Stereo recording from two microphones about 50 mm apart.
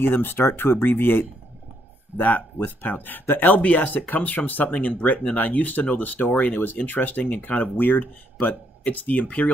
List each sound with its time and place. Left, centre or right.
0.0 s speech: left